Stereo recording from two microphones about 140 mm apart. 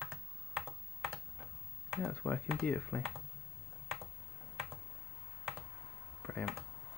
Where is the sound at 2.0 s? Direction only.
10° left (ahead or behind).